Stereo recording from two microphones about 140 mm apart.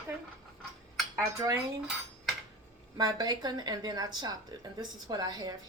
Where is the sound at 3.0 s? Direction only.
30° right (ahead or behind).